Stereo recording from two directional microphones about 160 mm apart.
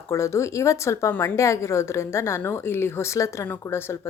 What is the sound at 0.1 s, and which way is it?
A woman's voice, 20° left (ahead or behind).